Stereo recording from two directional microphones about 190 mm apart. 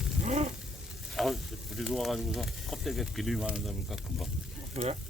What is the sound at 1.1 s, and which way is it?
Speech, centre (ahead or behind).